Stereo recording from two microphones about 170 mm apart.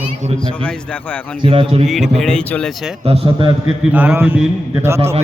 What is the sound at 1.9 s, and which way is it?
Speech, centre (ahead or behind).